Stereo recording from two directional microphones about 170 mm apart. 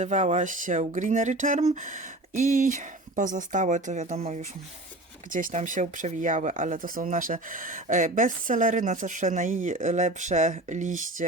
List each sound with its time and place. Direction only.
0.0 s speech: 45° right (ahead or behind)